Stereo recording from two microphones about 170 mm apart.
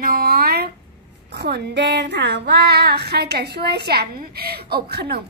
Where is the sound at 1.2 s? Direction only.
80° right.